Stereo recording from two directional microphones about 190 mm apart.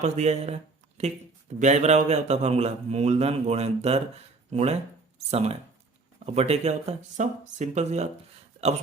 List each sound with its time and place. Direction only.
0.0 s a man's voice: 35° right (ahead or behind)